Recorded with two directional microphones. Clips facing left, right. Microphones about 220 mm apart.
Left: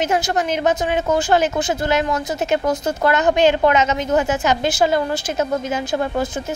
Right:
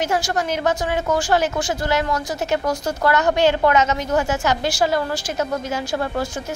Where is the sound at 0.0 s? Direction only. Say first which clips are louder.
Left 2 dB; 20° left (ahead or behind).